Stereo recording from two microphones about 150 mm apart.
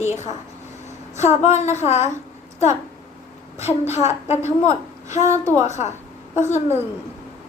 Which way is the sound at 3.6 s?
45° left (ahead or behind).